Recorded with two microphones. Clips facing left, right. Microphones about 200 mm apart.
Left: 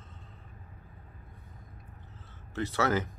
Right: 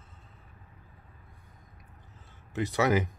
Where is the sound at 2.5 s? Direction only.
15° right (ahead or behind).